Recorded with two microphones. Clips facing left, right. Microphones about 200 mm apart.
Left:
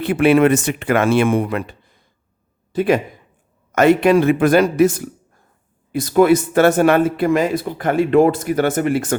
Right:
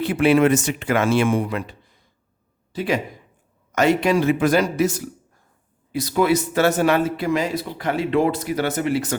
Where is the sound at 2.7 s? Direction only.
55° left (ahead or behind).